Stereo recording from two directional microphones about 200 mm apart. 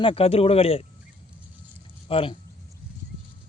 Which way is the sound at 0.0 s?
30° left (ahead or behind).